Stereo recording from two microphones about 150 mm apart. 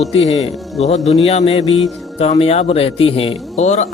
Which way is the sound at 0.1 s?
40° left (ahead or behind).